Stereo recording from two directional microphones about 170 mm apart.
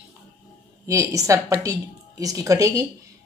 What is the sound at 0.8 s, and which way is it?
A woman's voice, 15° right (ahead or behind).